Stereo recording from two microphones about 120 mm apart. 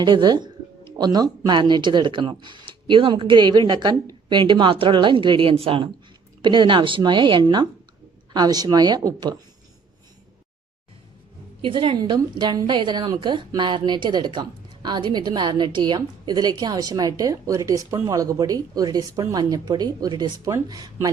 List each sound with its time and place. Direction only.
0.0 s speech: 35° right (ahead or behind)
6.4 s speech: 40° right (ahead or behind)
11.6 s speech: 45° right (ahead or behind)